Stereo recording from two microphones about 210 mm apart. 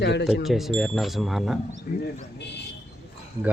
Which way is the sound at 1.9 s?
35° left (ahead or behind).